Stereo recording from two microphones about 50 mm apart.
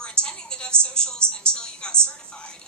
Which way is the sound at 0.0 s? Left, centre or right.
Centre.